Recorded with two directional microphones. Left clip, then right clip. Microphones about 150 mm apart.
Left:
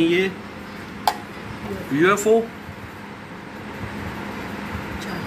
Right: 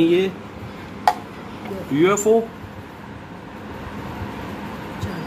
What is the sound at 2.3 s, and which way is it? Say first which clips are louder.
Speech: right 1 dB; 15° right (ahead or behind).